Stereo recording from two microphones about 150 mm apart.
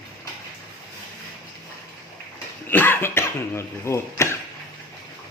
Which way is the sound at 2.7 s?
15° left (ahead or behind).